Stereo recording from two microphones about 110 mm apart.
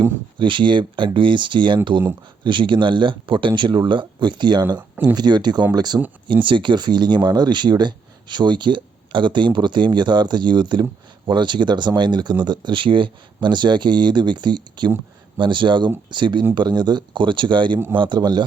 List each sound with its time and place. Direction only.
0.3 s speech: 45° right (ahead or behind)
4.8 s speech: 10° right (ahead or behind)
5.1 s speech: 40° right (ahead or behind)